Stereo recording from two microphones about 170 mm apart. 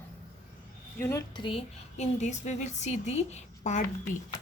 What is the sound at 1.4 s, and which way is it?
Speech, 35° left (ahead or behind).